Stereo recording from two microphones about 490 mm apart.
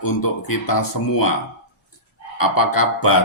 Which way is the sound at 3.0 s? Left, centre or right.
Left.